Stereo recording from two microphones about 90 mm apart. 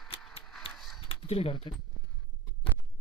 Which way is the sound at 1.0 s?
90° left.